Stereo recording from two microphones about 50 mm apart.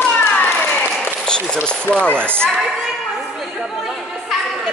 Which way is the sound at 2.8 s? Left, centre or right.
Centre.